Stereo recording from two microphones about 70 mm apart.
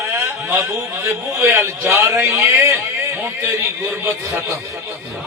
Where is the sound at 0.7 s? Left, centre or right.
Right.